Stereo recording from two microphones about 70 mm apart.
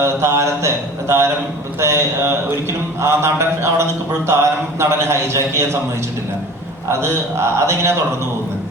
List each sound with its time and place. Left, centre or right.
0.0 s speech: right
7.1 s speech: right